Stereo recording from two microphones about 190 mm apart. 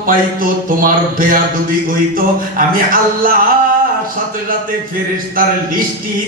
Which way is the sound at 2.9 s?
50° right (ahead or behind).